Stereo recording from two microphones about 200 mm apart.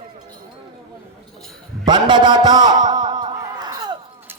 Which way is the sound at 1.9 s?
20° right (ahead or behind).